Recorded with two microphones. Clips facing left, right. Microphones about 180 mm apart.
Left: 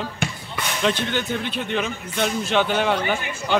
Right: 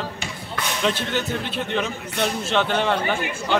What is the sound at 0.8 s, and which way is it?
Speech, centre (ahead or behind).